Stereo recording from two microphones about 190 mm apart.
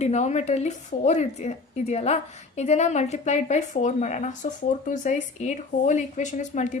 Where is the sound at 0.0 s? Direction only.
35° left (ahead or behind).